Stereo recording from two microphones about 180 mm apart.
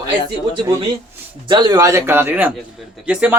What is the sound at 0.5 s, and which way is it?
A man's voice, 25° right (ahead or behind).